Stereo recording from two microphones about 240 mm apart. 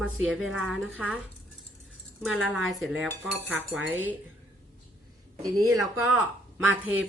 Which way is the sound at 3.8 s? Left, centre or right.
Right.